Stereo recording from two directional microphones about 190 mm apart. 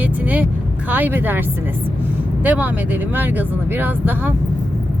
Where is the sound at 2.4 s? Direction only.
10° right (ahead or behind).